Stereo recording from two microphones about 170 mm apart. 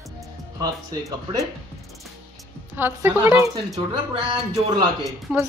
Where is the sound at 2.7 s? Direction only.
10° right (ahead or behind).